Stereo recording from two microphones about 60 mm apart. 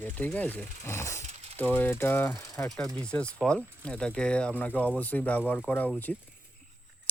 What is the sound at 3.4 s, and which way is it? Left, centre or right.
Speech, centre.